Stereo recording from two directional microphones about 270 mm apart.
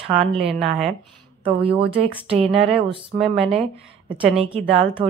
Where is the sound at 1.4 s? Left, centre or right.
Right.